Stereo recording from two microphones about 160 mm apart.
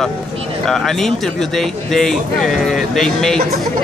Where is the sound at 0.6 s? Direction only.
5° left (ahead or behind).